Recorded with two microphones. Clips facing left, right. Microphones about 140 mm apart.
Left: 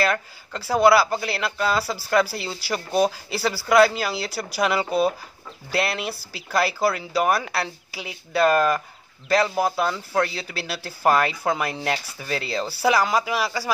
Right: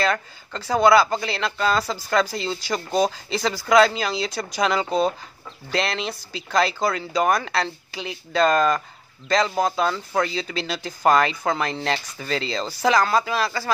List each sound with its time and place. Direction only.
0.0 s speech: 5° left (ahead or behind)